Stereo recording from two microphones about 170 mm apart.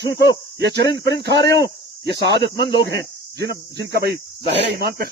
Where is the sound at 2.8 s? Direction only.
85° right; by 5.1 s 65° right (ahead or behind).